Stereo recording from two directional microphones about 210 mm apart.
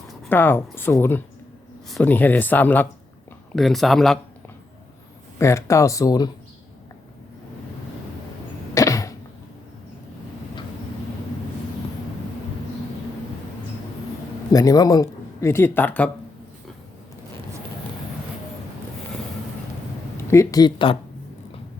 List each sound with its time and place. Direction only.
0.1 s speech: 5° left (ahead or behind)
5.4 s speech: 15° left (ahead or behind)
8.7 s cough: 15° left (ahead or behind)
14.5 s speech: 15° left (ahead or behind)
20.3 s speech: 15° left (ahead or behind)